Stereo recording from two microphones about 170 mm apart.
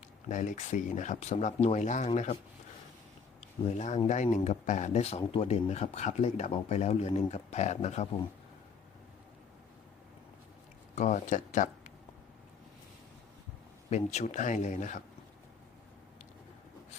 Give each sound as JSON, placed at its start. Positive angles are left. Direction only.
{"t": 0.3, "sound": "speech", "side_deg": 45}
{"t": 3.8, "sound": "speech", "side_deg": 45}
{"t": 10.9, "sound": "speech", "side_deg": 45}
{"t": 13.9, "sound": "speech", "side_deg": 40}